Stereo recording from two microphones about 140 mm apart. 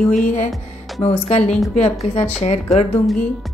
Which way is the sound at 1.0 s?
45° left (ahead or behind).